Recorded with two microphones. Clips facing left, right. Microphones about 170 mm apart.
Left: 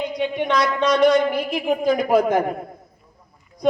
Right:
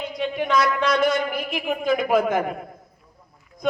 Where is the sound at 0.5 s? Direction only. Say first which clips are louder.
Left 1 dB; 30° left (ahead or behind).